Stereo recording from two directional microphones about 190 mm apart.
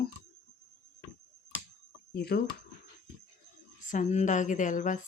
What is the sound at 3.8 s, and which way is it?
A woman's voice, 40° left (ahead or behind).